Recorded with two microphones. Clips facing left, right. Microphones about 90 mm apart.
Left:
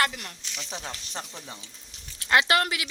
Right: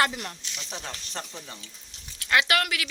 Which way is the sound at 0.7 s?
15° left (ahead or behind).